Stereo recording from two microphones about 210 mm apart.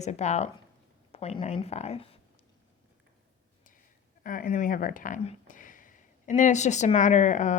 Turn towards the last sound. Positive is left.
turn(degrees=35)  # may be behind; listen again after turning